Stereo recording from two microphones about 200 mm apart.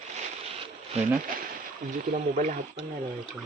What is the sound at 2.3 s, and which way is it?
Speech, 40° right (ahead or behind).